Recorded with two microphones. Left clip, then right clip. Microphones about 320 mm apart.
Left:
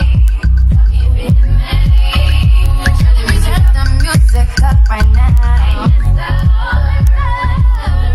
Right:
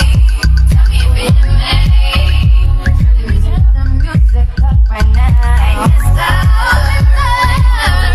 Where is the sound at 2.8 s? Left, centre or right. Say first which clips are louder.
Left 5 dB; centre.